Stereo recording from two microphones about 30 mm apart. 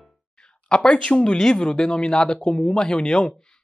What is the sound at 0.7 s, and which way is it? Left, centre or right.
Speech, centre.